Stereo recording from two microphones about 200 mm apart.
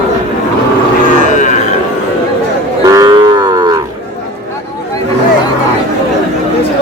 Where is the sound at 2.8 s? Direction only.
15° right (ahead or behind).